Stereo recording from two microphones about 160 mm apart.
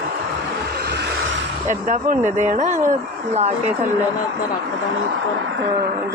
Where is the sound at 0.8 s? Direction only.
90° right.